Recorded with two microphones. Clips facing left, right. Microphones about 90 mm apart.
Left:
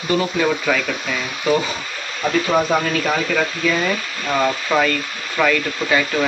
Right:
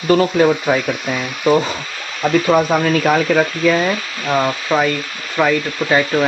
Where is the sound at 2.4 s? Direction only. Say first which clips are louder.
Right 3 dB; 45° right (ahead or behind).